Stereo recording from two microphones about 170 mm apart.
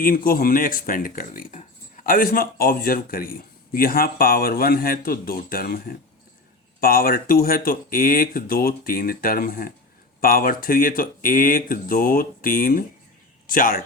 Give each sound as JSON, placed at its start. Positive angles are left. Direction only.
{"t": 0.0, "sound": "speech", "side_deg": 55}